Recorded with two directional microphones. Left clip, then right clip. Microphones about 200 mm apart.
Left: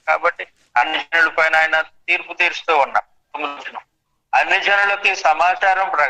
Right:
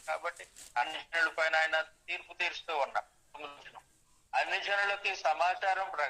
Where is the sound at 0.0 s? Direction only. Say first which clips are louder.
Left 19 dB; 40° left (ahead or behind).